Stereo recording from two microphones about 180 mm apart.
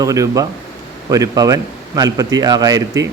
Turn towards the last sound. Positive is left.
turn(degrees=-20)  # may be behind; listen again after turning